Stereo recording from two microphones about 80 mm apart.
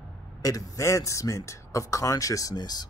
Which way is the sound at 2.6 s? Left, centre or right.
Left.